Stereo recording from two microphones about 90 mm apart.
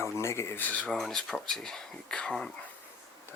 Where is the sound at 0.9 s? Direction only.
5° left (ahead or behind).